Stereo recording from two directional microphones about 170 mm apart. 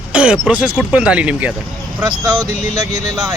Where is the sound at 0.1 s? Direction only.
5° right (ahead or behind).